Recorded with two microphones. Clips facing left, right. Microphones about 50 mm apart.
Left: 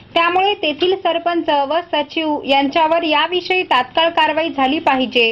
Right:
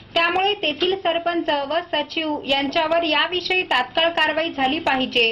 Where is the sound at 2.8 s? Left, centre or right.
Left.